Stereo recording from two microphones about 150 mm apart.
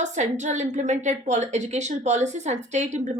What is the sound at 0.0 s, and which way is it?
A woman's voice, 55° right (ahead or behind).